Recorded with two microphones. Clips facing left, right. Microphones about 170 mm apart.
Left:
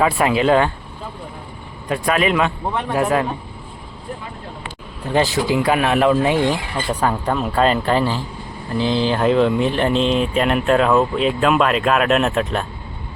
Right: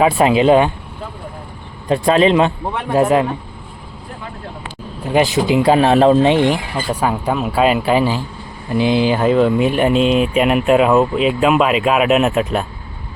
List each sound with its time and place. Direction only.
0.0 s speech: 20° right (ahead or behind)
1.9 s speech: 30° right (ahead or behind)
5.0 s speech: 15° right (ahead or behind)
6.7 s speech: 10° right (ahead or behind)